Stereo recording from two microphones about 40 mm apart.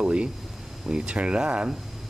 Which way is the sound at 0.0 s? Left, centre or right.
Right.